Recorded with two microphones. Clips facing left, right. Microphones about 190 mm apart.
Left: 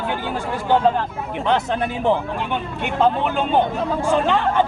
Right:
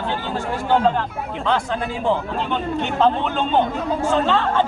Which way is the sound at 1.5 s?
20° left (ahead or behind).